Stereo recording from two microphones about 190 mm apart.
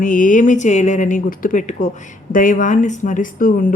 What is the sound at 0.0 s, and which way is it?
Speech, 45° left (ahead or behind).